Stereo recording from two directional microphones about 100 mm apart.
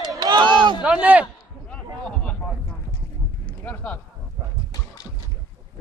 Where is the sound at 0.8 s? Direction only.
15° right (ahead or behind).